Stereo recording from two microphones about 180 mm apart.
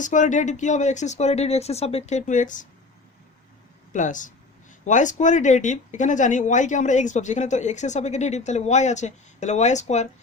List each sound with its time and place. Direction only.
0.0 s speech: 45° left (ahead or behind)
3.9 s speech: 45° left (ahead or behind)